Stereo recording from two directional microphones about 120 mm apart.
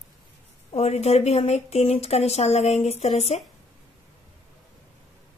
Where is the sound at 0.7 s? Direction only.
65° left (ahead or behind).